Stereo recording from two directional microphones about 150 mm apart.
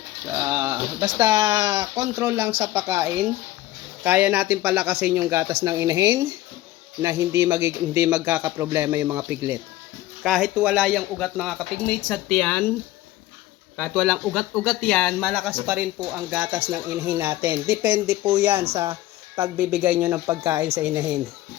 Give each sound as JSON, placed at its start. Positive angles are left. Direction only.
{"t": 0.3, "sound": "a man's voice", "side_deg": -25}
{"t": 10.2, "sound": "speech", "side_deg": 0}
{"t": 13.9, "sound": "a man's voice", "side_deg": -5}